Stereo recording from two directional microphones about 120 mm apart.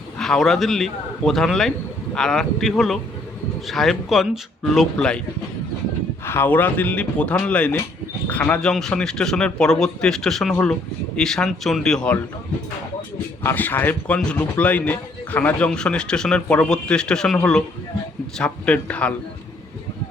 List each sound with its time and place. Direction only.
0.2 s a man's voice: 5° left (ahead or behind)
6.2 s a man's voice: 20° left (ahead or behind)
13.4 s speech: 15° left (ahead or behind)